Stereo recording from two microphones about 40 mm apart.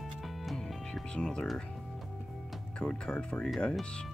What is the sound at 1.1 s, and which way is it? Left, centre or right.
Speech, left.